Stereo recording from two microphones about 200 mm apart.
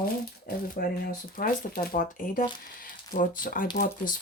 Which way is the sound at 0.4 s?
45° left (ahead or behind).